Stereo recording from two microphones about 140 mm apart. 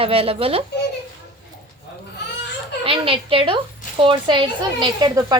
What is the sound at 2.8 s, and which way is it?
Speech, 40° right (ahead or behind).